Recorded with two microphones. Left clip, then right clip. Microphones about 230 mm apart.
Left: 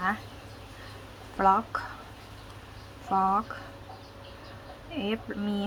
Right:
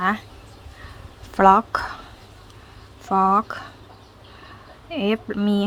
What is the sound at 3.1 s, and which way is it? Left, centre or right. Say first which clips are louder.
Speech: right 7 dB; right.